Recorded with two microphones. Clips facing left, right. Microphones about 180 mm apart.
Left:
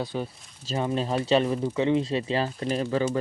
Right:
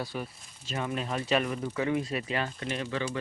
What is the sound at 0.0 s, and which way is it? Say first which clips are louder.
Speech: left 5 dB; 20° left (ahead or behind).